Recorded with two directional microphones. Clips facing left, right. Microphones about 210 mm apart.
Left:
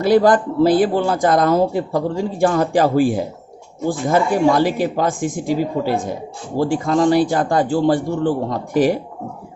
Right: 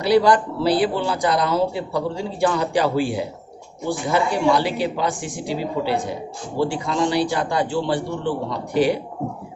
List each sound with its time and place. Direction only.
0.0 s speech: 50° left (ahead or behind)